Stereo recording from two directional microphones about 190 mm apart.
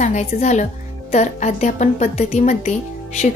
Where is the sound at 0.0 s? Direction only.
40° left (ahead or behind).